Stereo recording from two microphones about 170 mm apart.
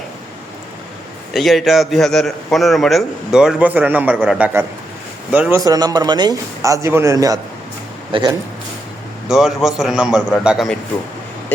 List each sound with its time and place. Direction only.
1.3 s a man's voice: centre (ahead or behind); by 8.4 s 25° right (ahead or behind)
9.3 s a man's voice: centre (ahead or behind)